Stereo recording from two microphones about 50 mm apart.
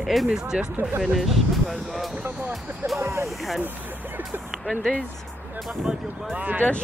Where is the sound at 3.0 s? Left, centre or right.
Right.